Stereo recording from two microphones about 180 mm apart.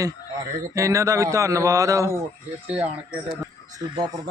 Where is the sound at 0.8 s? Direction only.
15° right (ahead or behind).